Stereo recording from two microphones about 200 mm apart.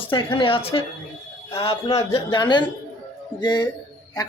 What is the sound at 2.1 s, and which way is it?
Speech, 25° left (ahead or behind).